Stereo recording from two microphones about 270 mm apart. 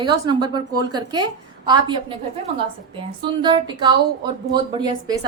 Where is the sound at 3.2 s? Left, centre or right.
Centre.